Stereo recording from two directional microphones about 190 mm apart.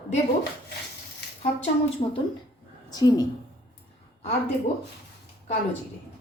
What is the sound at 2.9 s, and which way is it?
Speech, 20° left (ahead or behind).